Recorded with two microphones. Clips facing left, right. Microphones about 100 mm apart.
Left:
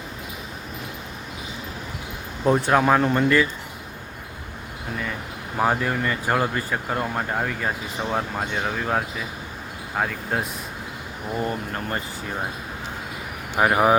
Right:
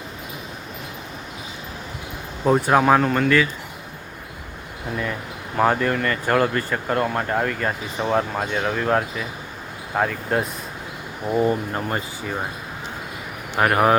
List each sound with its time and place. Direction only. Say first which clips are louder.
2.4 s speech: right 2 dB; 5° right (ahead or behind)
3.1 s speech: even; 10° left (ahead or behind)
5.5 s speech: right 3 dB; 10° left (ahead or behind)
11.3 s speech: right 7 dB; 20° right (ahead or behind)
13.6 s speech: right 1 dB; 10° left (ahead or behind)